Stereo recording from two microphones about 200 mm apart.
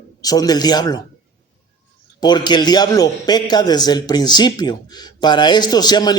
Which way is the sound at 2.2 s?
20° left (ahead or behind).